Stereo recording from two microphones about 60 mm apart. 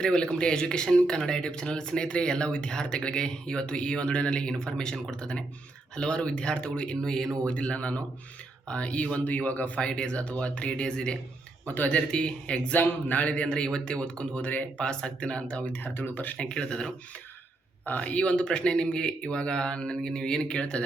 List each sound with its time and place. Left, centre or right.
0.0 s speech: centre
7.4 s speech: centre
15.6 s speech: left; by 16.9 s centre
17.8 s speech: left